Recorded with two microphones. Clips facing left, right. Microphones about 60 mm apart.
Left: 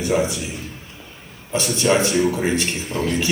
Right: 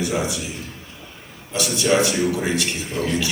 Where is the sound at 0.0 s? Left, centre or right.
Left.